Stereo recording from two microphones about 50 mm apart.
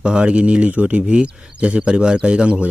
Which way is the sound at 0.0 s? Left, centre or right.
Right.